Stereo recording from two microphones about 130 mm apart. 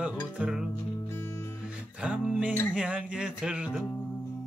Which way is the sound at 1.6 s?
5° right (ahead or behind).